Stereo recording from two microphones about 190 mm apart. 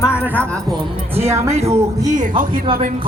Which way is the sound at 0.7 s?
30° right (ahead or behind).